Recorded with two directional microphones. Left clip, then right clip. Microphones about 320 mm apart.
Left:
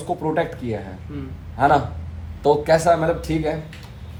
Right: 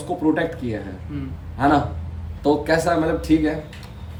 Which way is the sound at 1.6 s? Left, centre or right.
Left.